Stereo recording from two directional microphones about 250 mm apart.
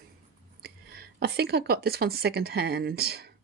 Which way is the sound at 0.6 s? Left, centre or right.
Right.